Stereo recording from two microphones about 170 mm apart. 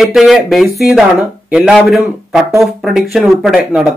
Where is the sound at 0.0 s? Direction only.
Centre (ahead or behind).